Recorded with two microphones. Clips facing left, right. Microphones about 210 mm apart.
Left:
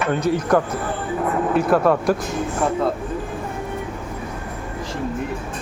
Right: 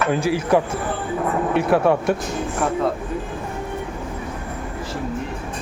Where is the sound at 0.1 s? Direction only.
5° right (ahead or behind).